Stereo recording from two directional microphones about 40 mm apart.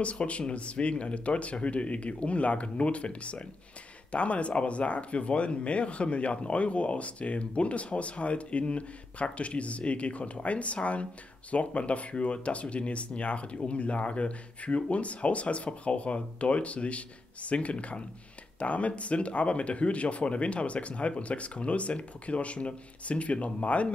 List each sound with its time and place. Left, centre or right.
0.0 s speech: left